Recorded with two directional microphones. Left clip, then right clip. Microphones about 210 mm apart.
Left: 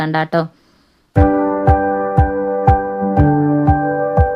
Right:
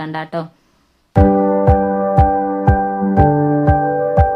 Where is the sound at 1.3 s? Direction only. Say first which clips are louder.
Right 1 dB; centre (ahead or behind).